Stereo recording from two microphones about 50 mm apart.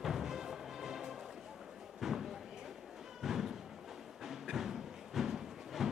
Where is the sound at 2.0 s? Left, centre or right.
Centre.